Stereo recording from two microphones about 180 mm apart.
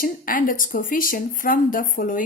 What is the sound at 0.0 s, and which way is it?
A woman's voice, 50° left (ahead or behind).